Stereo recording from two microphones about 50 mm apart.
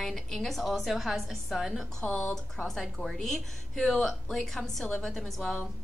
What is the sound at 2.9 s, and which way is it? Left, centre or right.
A woman's voice, centre.